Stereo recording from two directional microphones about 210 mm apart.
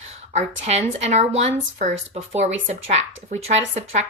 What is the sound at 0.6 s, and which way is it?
Speech, 30° right (ahead or behind).